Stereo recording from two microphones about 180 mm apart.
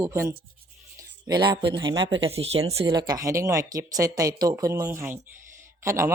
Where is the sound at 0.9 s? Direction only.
25° right (ahead or behind).